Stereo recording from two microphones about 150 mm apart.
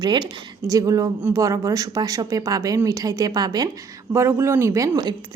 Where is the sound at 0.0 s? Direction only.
30° right (ahead or behind).